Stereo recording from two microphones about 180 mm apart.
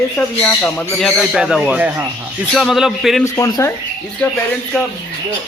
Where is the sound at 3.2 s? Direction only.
15° left (ahead or behind).